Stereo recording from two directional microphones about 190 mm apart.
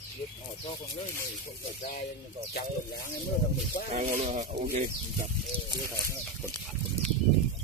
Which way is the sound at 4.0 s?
35° right (ahead or behind).